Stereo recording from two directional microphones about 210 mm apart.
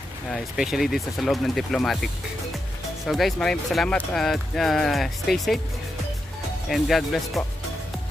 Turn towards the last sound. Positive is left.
turn(degrees=0)  # may be behind; listen again after turning